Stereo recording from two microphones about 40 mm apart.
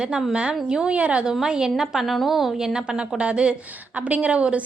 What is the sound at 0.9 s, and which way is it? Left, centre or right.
Speech, right.